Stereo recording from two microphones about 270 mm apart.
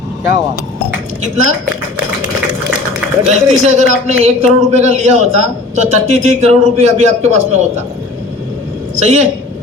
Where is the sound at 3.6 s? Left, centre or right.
Right.